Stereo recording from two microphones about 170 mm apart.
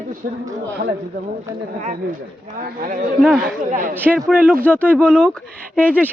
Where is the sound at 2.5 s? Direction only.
55° right (ahead or behind).